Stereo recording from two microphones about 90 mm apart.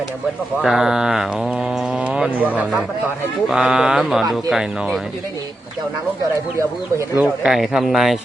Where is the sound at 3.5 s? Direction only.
5° right (ahead or behind).